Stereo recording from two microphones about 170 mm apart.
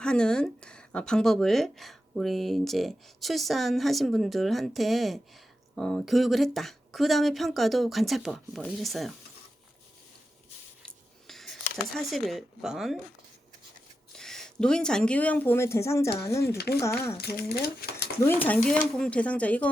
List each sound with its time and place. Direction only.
0.0 s a woman's voice: 5° left (ahead or behind)
10.8 s a sound: centre (ahead or behind)
11.9 s a woman's voice: centre (ahead or behind)
14.2 s speech: 5° left (ahead or behind)
16.6 s speech: 70° left (ahead or behind)
16.8 s speech: 15° left (ahead or behind)
17.2 s speech: 70° left (ahead or behind)
18.3 s speech: 10° left (ahead or behind)